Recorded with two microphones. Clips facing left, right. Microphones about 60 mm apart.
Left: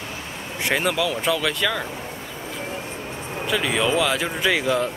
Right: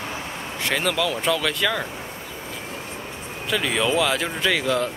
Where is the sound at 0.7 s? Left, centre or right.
Centre.